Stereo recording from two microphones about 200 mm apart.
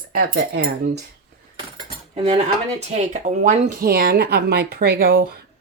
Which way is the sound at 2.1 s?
25° right (ahead or behind).